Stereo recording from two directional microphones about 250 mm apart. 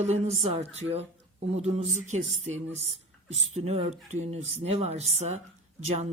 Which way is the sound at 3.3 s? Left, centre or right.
Right.